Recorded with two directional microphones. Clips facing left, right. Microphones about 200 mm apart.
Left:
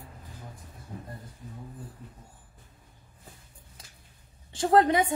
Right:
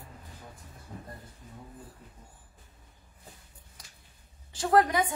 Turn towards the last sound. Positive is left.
turn(degrees=25)  # may be behind; listen again after turning